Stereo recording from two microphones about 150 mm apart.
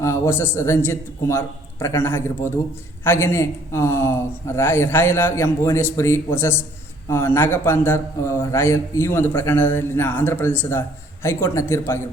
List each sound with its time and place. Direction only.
0.0 s a man's voice: 20° left (ahead or behind)